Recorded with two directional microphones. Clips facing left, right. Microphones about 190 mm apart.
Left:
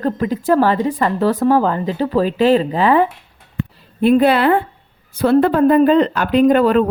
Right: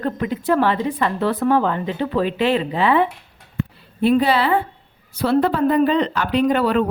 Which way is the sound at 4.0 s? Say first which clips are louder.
Left 4 dB; 55° left (ahead or behind).